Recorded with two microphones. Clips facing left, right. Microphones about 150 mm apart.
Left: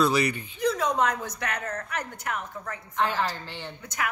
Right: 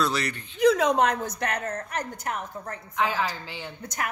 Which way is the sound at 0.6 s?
90° right.